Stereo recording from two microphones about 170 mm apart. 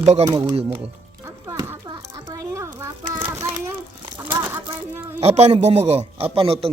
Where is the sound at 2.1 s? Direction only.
20° right (ahead or behind).